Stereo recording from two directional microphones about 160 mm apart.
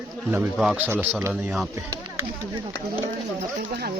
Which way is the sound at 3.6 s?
80° right.